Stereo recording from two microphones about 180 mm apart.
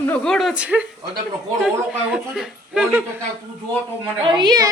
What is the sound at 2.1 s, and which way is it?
Speech, 5° right (ahead or behind).